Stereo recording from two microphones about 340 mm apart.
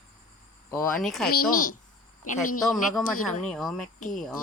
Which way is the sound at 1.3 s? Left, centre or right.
Left.